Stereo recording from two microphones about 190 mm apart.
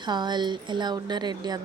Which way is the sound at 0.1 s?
25° right (ahead or behind).